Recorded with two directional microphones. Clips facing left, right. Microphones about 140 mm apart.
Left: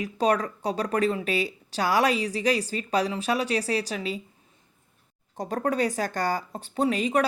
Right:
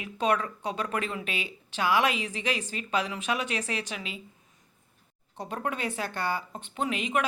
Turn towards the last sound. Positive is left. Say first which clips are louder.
# left 5 dB
turn(degrees=35)  # may be behind; listen again after turning